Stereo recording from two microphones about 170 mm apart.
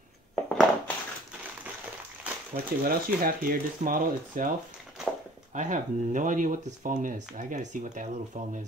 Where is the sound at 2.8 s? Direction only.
60° right (ahead or behind).